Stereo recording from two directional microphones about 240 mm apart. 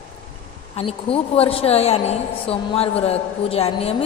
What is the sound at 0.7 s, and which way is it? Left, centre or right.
A woman's voice, left.